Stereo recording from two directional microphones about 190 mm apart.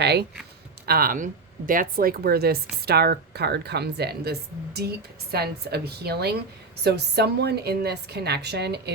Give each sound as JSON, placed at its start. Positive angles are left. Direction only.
{"t": 0.0, "sound": "a woman's voice", "side_deg": -60}
{"t": 0.9, "sound": "a woman's voice", "side_deg": -50}